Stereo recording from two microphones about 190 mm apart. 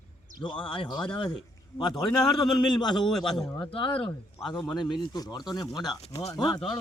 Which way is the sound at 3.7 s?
30° left (ahead or behind).